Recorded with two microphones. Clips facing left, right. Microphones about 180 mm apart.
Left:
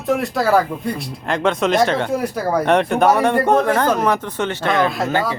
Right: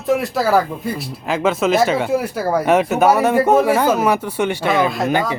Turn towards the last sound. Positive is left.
turn(degrees=-15)  # may be behind; listen again after turning